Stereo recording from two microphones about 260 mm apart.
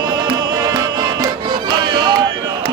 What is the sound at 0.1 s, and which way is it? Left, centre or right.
Music, centre.